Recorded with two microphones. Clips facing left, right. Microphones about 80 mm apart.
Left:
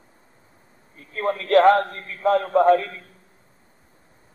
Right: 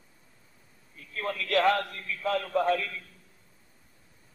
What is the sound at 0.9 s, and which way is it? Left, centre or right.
A man's voice, left.